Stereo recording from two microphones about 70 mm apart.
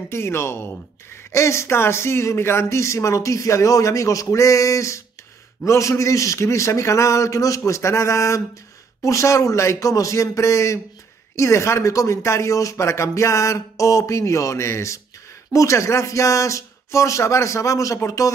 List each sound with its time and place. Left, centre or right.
0.1 s speech: left